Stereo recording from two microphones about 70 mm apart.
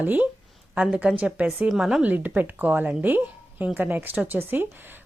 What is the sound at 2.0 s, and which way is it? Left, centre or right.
A woman's voice, right.